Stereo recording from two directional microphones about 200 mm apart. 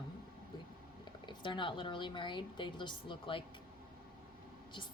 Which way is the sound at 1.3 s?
25° left (ahead or behind).